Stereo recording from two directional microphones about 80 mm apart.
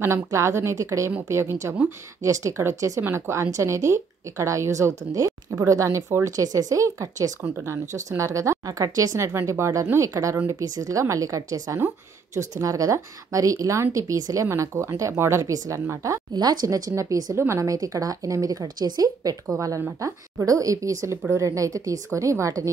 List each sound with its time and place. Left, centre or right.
0.0 s speech: right
16.3 s speech: right
19.5 s speech: right